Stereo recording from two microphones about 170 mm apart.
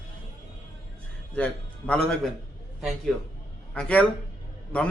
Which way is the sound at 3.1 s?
Centre (ahead or behind).